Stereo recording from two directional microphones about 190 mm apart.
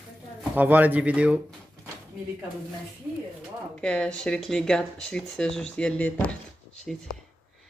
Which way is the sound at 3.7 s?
5° left (ahead or behind).